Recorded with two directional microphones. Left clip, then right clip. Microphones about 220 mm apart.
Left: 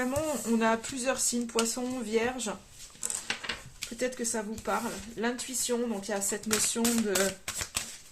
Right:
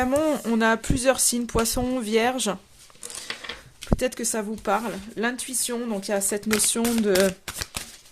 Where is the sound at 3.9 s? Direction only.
45° right (ahead or behind).